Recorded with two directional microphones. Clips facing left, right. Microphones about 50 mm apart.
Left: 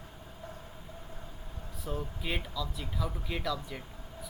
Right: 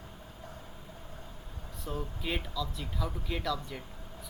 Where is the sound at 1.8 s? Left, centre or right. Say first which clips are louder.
Even; centre.